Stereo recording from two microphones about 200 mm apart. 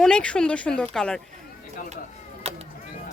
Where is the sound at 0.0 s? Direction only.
5° left (ahead or behind).